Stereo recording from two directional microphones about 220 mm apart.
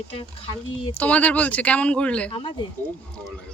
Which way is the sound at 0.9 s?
5° left (ahead or behind).